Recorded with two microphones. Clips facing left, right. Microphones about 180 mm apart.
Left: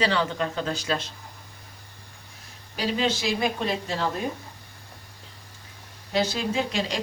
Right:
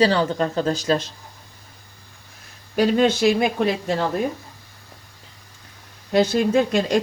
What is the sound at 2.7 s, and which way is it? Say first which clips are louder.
Speech: right 9 dB; 55° right (ahead or behind).